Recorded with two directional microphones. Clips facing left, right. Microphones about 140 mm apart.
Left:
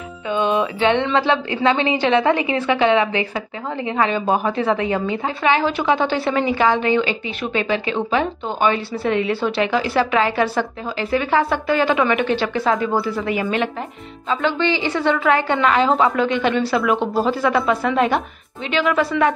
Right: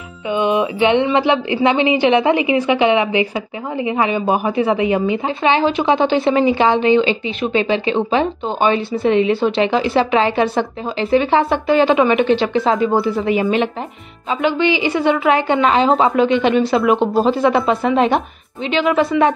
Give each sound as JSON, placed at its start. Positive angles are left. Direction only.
{"t": 0.3, "sound": "a woman's voice", "side_deg": -15}